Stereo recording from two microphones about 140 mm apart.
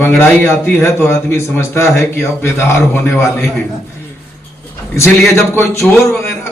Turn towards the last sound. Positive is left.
turn(degrees=15)  # may be behind; listen again after turning